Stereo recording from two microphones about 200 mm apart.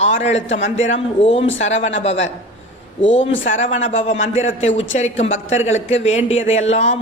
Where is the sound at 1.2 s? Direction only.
25° left (ahead or behind).